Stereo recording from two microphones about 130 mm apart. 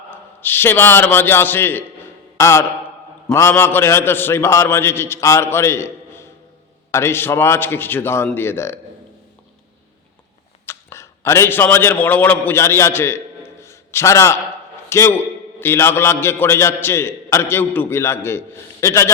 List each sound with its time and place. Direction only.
0.1 s a man's voice: 15° left (ahead or behind)
10.7 s a man's voice: 20° left (ahead or behind)